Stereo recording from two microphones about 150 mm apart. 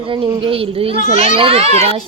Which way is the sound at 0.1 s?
35° right (ahead or behind).